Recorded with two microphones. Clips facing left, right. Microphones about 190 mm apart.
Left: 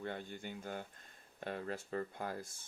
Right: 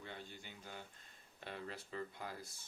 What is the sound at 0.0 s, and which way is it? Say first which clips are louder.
Speech: left 8 dB; 55° left (ahead or behind).